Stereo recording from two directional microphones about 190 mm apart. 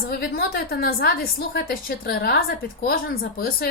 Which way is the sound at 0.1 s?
55° left (ahead or behind).